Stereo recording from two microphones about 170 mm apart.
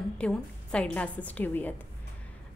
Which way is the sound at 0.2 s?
5° left (ahead or behind).